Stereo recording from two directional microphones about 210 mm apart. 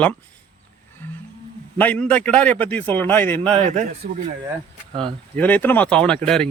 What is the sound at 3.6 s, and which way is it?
Speech, 35° right (ahead or behind).